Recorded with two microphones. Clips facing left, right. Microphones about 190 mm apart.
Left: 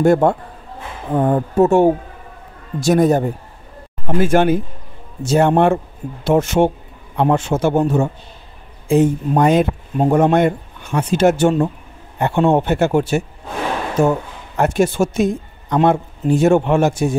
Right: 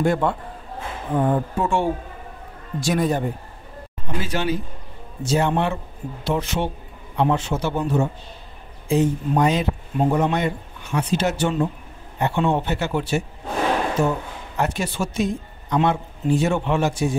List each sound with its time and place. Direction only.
0.0 s speech: 45° left (ahead or behind)